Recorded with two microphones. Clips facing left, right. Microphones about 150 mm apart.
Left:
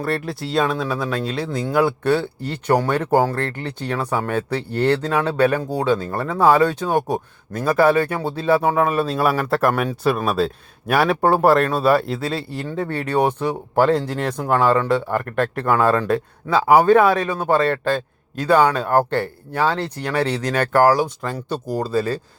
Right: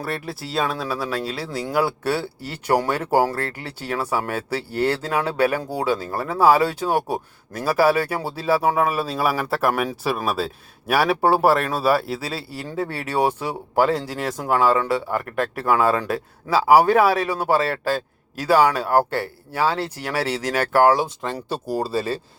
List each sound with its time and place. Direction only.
0.0 s speech: 5° right (ahead or behind)
20.8 s speech: 30° right (ahead or behind)
21.3 s speech: 10° right (ahead or behind)